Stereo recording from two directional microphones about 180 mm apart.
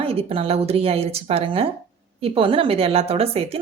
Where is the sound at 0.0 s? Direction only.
30° right (ahead or behind).